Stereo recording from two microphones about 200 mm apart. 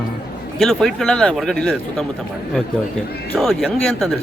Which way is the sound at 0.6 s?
Centre (ahead or behind).